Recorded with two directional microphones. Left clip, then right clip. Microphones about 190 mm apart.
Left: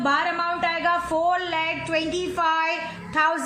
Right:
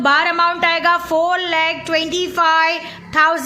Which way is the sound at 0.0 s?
45° right (ahead or behind).